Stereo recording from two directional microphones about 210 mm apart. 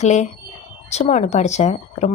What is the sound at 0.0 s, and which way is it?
Speech, 35° left (ahead or behind).